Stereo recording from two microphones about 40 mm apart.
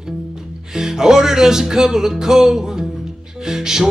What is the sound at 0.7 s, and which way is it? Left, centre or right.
Music, centre.